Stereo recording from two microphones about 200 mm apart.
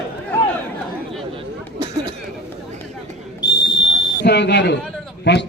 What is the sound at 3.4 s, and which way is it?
Whistle, 20° left (ahead or behind).